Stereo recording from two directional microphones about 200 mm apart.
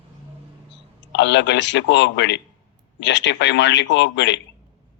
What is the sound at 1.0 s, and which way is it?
Speech, 60° left (ahead or behind).